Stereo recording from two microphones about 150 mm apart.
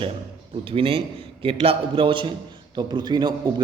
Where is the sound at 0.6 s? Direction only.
35° right (ahead or behind).